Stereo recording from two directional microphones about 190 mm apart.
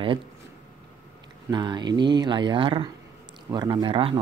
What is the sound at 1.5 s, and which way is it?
Speech, 25° right (ahead or behind).